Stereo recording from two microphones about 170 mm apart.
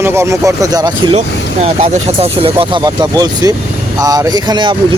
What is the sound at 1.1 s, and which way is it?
Speech, 40° right (ahead or behind).